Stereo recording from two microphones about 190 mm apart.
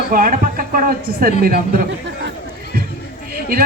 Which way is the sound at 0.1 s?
45° right (ahead or behind).